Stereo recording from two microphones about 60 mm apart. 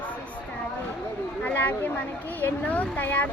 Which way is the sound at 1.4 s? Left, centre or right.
Left.